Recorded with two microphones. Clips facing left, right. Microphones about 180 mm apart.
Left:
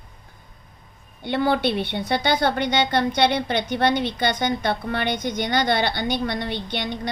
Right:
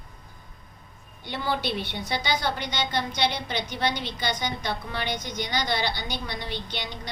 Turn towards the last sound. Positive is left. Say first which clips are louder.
# left 8 dB
turn(degrees=55)  # may be behind; listen again after turning